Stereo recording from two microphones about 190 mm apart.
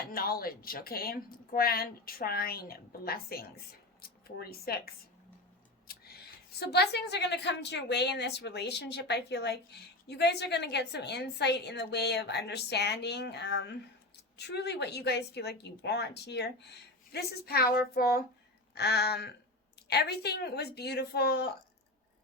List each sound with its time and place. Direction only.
0.1 s speech: 50° left (ahead or behind)
5.9 s a woman's voice: 55° left (ahead or behind)